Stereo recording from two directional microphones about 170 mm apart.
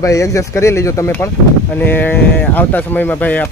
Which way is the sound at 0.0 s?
20° left (ahead or behind).